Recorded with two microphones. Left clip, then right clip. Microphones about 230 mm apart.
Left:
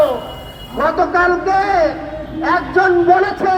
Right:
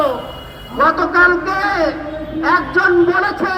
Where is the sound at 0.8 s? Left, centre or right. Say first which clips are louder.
Right 2 dB; right.